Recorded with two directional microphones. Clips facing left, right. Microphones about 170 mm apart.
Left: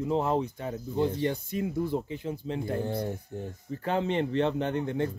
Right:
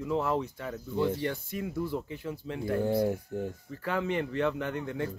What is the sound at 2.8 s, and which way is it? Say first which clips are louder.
Speech: right 4 dB; 5° right (ahead or behind).